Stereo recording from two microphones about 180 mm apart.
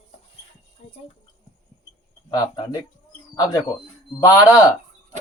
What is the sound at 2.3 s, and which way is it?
Speech, 20° left (ahead or behind).